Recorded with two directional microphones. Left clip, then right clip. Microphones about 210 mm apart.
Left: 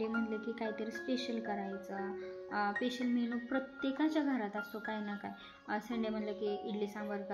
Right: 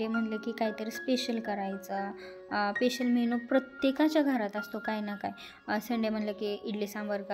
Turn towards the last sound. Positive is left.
turn(degrees=-55)  # may be behind; listen again after turning